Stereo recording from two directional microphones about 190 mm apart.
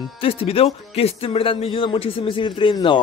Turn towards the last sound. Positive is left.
turn(degrees=25)  # may be behind; listen again after turning